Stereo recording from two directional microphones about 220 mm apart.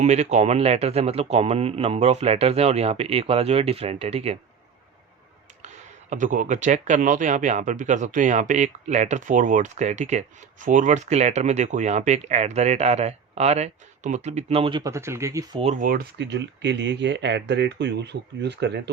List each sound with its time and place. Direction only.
0.0 s speech: 30° right (ahead or behind)
5.6 s speech: 35° right (ahead or behind); by 15.6 s 15° right (ahead or behind)
15.6 s speech: 35° right (ahead or behind); by 18.8 s 50° right (ahead or behind)